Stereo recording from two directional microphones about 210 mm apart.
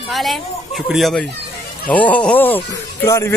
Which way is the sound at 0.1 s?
Centre (ahead or behind).